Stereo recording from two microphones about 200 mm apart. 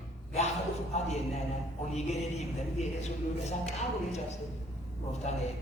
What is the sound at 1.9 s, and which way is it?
Speech, 35° left (ahead or behind).